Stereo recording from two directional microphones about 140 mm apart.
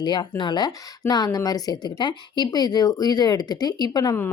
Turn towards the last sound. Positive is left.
turn(degrees=30)  # may be behind; listen again after turning